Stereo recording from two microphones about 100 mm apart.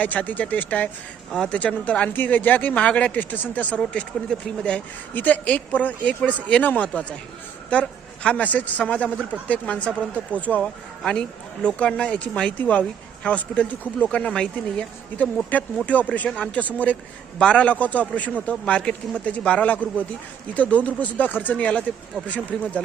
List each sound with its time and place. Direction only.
0.0 s a man's voice: 15° left (ahead or behind)